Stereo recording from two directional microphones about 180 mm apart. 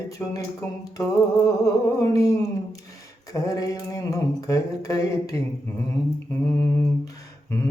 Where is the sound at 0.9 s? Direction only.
20° left (ahead or behind).